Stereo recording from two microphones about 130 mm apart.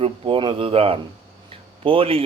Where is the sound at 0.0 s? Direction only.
40° right (ahead or behind).